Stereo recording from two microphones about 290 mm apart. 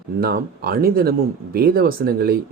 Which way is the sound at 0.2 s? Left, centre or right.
Right.